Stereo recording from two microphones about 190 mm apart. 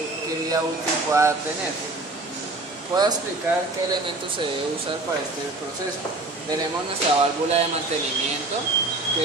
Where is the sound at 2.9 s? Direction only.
20° right (ahead or behind).